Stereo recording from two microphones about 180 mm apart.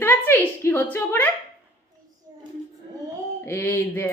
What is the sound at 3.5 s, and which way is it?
Speech, 10° left (ahead or behind).